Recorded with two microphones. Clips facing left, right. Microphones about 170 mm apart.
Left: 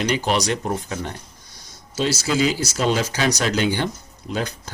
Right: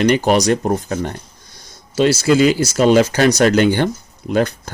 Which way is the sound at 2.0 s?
60° right (ahead or behind).